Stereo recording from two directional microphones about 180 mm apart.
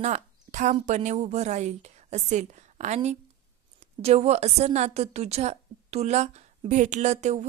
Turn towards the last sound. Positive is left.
turn(degrees=-40)  # may be behind; listen again after turning